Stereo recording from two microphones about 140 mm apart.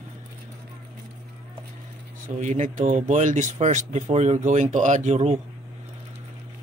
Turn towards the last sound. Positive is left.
turn(degrees=-55)  # may be behind; listen again after turning